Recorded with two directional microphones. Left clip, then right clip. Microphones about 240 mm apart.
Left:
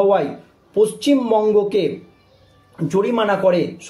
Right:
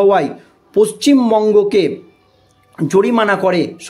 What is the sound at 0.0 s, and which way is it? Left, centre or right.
Speech, right.